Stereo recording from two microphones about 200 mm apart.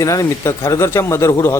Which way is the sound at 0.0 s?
15° left (ahead or behind).